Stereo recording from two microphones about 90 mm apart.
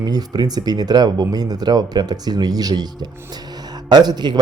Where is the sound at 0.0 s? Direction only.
50° right (ahead or behind).